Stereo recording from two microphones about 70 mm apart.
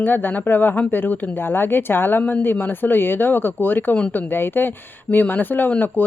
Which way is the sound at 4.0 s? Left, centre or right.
Centre.